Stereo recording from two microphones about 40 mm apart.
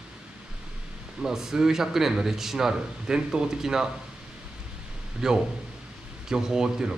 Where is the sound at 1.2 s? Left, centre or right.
Centre.